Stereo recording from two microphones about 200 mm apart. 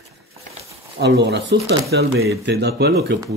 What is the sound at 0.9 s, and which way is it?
Speech, 55° right (ahead or behind).